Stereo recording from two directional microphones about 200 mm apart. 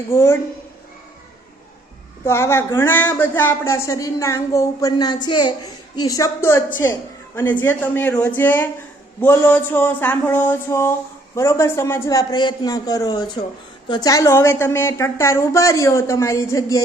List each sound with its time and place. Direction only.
0.1 s speech: 15° left (ahead or behind)
2.2 s a man's voice: 15° left (ahead or behind)